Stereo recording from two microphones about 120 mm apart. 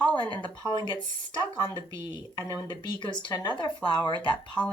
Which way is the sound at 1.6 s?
40° left (ahead or behind).